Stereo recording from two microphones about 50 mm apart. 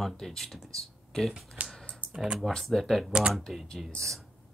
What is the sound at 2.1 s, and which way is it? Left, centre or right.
Computer keyboard, centre.